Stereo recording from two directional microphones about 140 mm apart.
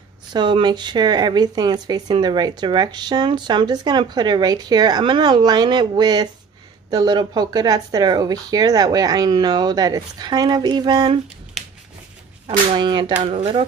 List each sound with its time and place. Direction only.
0.3 s speech: 35° right (ahead or behind)
12.7 s speech: 35° right (ahead or behind)